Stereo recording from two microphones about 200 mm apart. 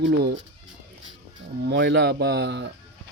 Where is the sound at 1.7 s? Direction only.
60° right (ahead or behind).